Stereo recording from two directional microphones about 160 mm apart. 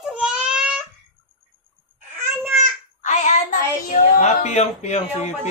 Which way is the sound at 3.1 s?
50° left (ahead or behind).